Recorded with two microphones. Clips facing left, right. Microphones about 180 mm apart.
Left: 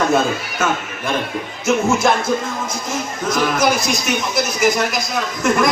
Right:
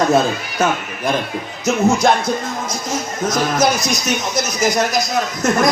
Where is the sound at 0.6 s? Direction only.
35° right (ahead or behind).